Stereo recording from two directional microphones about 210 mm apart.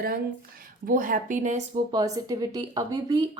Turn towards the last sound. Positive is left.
turn(degrees=-20)  # may be behind; listen again after turning